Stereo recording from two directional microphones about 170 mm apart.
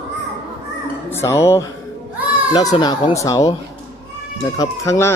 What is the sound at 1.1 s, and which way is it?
Speech, 15° left (ahead or behind).